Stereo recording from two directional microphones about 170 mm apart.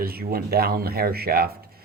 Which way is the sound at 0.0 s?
65° right (ahead or behind).